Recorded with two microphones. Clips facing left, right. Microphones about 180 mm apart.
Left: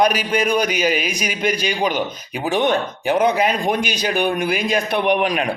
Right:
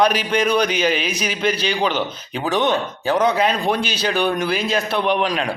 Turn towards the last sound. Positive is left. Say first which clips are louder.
# left 2 dB
turn(degrees=15)  # may be behind; listen again after turning